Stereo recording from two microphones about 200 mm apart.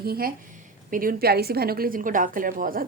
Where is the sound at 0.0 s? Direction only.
50° right (ahead or behind).